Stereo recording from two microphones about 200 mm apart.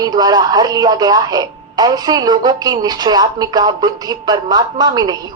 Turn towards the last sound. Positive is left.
turn(degrees=-20)  # may be behind; listen again after turning